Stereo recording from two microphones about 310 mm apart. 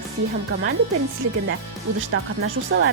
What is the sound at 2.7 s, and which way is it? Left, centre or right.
Speech, right.